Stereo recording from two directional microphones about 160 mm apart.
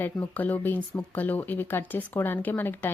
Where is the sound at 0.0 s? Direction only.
10° left (ahead or behind).